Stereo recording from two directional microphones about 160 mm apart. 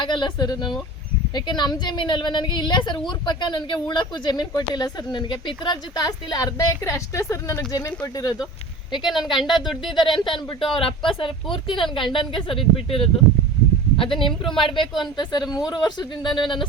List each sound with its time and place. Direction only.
0.0 s speech: 30° left (ahead or behind)
9.0 s speech: centre (ahead or behind)
10.1 s speech: 30° left (ahead or behind)